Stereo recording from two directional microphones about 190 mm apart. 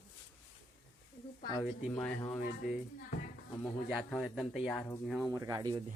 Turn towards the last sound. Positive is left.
turn(degrees=-20)  # may be behind; listen again after turning